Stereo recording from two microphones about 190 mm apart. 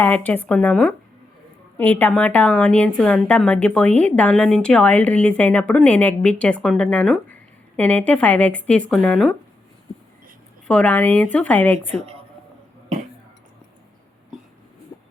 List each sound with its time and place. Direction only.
0.0 s a woman's voice: 10° left (ahead or behind)
10.7 s a woman's voice: 5° left (ahead or behind)
11.9 s a woman's voice: 35° right (ahead or behind)